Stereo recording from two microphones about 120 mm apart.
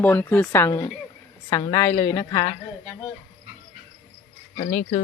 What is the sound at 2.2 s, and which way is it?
Speech, 35° left (ahead or behind).